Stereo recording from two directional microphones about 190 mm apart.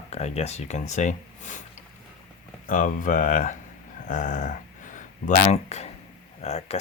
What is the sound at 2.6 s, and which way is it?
Speech, 45° left (ahead or behind).